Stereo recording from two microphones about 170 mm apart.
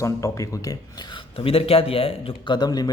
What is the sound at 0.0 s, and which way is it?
Speech, 20° left (ahead or behind).